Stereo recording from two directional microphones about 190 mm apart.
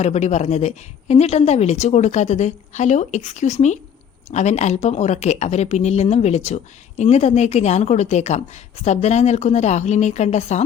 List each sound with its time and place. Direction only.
0.0 s a woman's voice: 35° left (ahead or behind)